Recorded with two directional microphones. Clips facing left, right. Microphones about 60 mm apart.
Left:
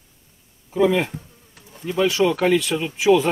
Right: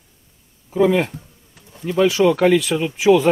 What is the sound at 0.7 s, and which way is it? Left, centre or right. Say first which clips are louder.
Speech: right 2 dB; centre.